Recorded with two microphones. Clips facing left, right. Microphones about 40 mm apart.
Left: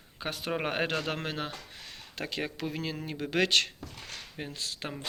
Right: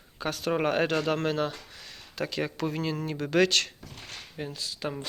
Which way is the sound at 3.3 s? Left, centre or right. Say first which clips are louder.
Right 3 dB; left.